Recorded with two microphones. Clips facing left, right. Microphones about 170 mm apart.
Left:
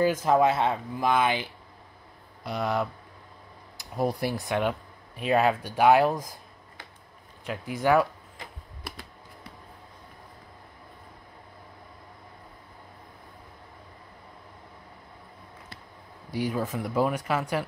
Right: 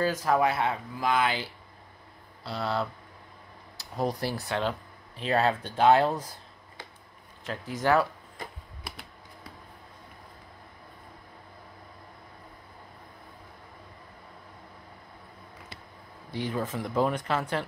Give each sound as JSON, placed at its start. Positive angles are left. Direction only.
{"t": 0.0, "sound": "speech", "side_deg": 20}
{"t": 3.8, "sound": "a sound", "side_deg": 15}
{"t": 4.2, "sound": "speech", "side_deg": 15}
{"t": 7.4, "sound": "speech", "side_deg": 10}
{"t": 16.3, "sound": "speech", "side_deg": 10}